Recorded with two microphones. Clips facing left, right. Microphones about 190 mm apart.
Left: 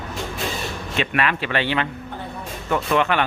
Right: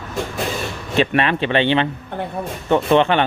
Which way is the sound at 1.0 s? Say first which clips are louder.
Right 6 dB; 30° right (ahead or behind).